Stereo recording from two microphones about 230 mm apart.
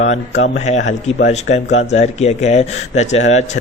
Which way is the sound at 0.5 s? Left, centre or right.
Left.